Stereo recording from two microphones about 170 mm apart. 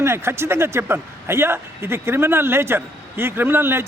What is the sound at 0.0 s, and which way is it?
A man's voice, 15° right (ahead or behind).